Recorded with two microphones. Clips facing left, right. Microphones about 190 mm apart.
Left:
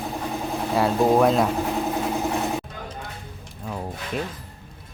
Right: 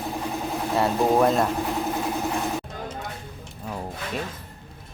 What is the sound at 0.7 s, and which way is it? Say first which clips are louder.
Speech: left 2 dB; centre (ahead or behind).